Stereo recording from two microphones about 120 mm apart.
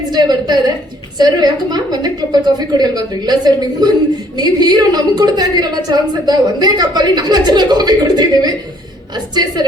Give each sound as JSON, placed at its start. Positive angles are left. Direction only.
{"t": 0.1, "sound": "a woman's voice", "side_deg": -35}